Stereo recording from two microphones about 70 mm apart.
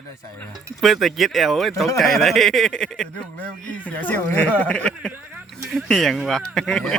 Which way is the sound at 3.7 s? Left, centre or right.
Centre.